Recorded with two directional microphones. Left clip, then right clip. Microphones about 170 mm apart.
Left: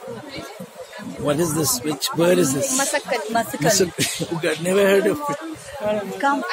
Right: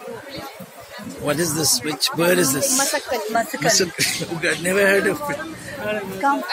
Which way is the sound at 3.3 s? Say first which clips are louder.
Even; 35° left (ahead or behind).